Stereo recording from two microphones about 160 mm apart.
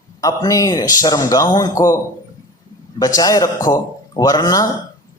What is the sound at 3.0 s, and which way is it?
A man's voice, 25° left (ahead or behind).